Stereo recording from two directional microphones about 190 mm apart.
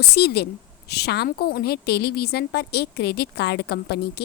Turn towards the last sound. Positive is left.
turn(degrees=60)  # may be behind; listen again after turning